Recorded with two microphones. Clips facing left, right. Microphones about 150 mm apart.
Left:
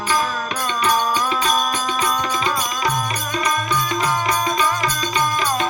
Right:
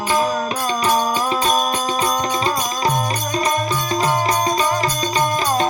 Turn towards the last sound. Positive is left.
turn(degrees=-35)  # may be behind; listen again after turning